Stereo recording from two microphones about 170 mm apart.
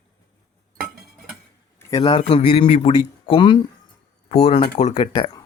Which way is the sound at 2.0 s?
35° left (ahead or behind).